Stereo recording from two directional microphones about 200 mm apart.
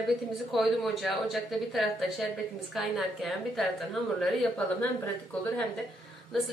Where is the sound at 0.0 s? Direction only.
Centre (ahead or behind).